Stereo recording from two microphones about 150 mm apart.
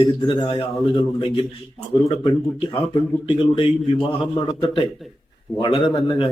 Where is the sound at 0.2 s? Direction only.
30° left (ahead or behind).